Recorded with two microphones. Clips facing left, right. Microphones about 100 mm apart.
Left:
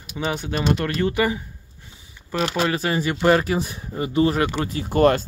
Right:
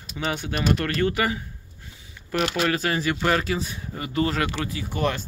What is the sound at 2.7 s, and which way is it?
Speech, 20° left (ahead or behind).